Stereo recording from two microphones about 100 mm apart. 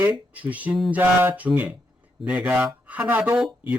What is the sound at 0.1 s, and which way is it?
Speech, 15° right (ahead or behind).